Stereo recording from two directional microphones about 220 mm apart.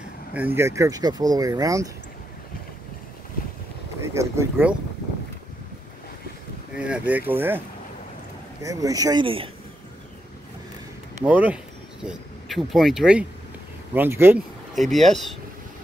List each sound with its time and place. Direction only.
0.6 s speech: 15° right (ahead or behind)
4.1 s speech: 10° right (ahead or behind)
6.8 s speech: 5° right (ahead or behind)
8.6 s speech: 15° right (ahead or behind)
11.2 s speech: 5° right (ahead or behind)
14.8 s speech: centre (ahead or behind)